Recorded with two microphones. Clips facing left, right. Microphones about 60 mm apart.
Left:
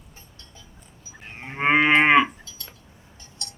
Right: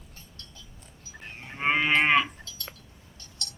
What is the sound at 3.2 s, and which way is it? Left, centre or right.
Cowbell, left.